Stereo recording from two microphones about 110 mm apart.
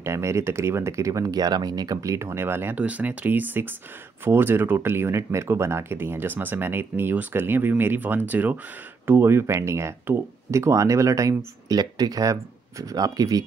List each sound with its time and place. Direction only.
0.0 s speech: 25° right (ahead or behind)